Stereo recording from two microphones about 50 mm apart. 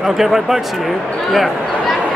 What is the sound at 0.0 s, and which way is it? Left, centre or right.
Speech, centre.